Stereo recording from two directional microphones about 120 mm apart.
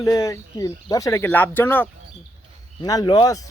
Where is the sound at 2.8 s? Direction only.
35° left (ahead or behind).